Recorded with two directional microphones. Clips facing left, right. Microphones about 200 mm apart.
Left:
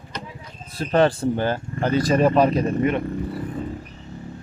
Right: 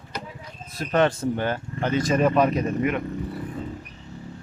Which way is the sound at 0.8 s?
35° left (ahead or behind).